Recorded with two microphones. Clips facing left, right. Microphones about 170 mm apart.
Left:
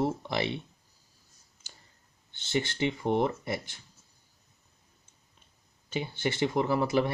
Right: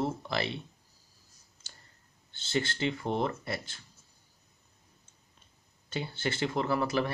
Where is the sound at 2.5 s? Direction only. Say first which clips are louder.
Left 2 dB; 20° left (ahead or behind).